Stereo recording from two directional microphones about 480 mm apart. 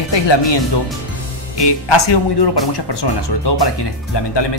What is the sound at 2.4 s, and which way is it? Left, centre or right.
Speech, left.